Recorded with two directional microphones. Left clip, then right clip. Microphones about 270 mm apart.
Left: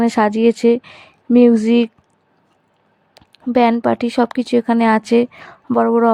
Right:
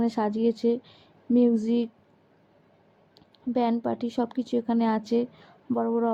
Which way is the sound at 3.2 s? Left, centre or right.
Left.